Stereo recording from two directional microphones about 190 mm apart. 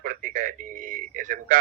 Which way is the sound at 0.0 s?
45° right (ahead or behind).